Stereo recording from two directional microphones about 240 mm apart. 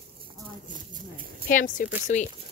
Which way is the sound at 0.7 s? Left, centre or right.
Right.